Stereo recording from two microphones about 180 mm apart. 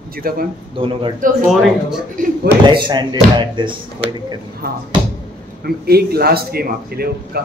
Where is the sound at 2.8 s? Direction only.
25° right (ahead or behind).